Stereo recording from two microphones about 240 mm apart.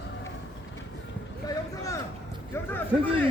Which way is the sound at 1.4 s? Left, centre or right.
Centre.